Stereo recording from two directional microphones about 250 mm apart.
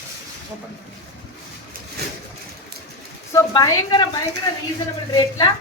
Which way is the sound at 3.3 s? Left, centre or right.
Centre.